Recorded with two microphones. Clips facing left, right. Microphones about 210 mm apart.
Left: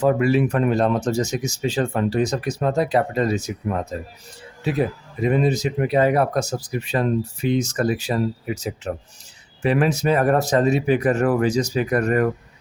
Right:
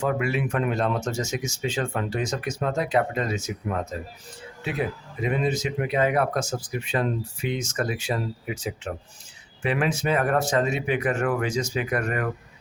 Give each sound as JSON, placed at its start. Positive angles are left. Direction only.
{"t": 0.0, "sound": "speech", "side_deg": 35}